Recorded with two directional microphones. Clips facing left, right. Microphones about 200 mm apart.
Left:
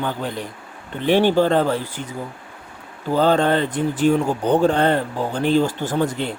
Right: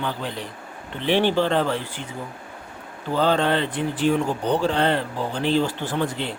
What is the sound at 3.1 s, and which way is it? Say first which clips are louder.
Speech: left 4 dB; 45° left (ahead or behind).